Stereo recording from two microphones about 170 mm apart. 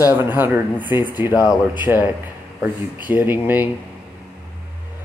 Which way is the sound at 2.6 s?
10° right (ahead or behind).